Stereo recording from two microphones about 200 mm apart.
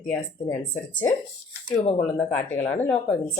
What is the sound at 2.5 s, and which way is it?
Speech, 10° left (ahead or behind).